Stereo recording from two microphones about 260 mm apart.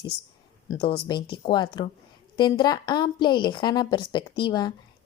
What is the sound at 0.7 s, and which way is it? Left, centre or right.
A woman's voice, centre.